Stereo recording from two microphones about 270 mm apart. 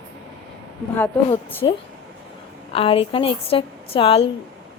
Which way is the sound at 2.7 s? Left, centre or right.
Left.